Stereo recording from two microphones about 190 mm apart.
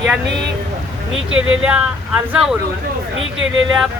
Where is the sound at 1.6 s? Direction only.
5° right (ahead or behind).